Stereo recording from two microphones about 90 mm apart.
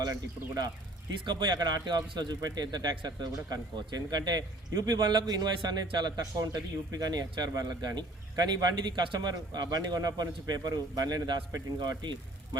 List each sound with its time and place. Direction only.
0.0 s a man's voice: 50° right (ahead or behind)